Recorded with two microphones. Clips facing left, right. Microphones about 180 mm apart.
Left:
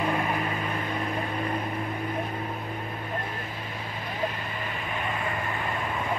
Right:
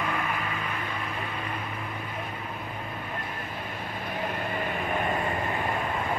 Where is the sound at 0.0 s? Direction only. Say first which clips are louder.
Left 4 dB; 30° left (ahead or behind).